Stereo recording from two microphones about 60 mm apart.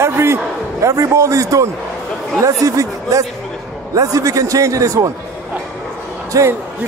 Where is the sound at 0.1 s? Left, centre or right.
Right.